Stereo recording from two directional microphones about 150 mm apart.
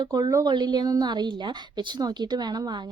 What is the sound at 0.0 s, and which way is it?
A woman's voice, 25° right (ahead or behind).